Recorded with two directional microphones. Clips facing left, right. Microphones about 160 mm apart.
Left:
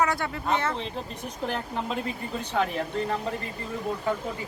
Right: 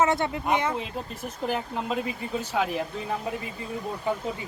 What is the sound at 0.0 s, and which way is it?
Speech, 20° right (ahead or behind).